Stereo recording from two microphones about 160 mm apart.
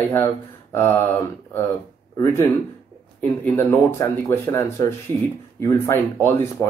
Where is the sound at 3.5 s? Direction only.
15° left (ahead or behind).